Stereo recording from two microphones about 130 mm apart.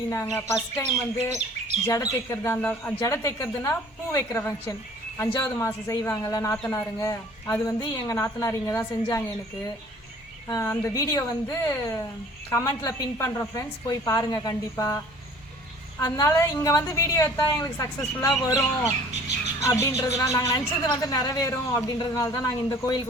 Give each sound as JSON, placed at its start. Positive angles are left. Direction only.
{"t": 0.1, "sound": "a woman's voice", "side_deg": 20}
{"t": 1.9, "sound": "a woman's voice", "side_deg": 25}
{"t": 3.0, "sound": "a woman's voice", "side_deg": 25}
{"t": 10.5, "sound": "a woman's voice", "side_deg": 25}